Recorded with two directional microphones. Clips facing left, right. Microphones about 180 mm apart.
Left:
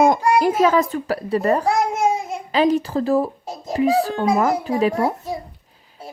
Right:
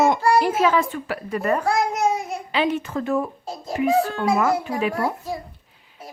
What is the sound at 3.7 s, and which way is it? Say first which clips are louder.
Speech: left 2 dB; 35° left (ahead or behind).